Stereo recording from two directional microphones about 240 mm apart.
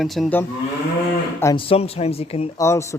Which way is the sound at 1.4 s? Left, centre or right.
Centre.